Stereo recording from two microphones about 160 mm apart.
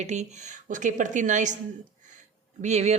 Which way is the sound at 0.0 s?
45° right (ahead or behind).